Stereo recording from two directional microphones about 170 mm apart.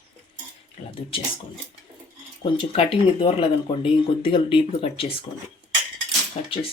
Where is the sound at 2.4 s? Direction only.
30° left (ahead or behind).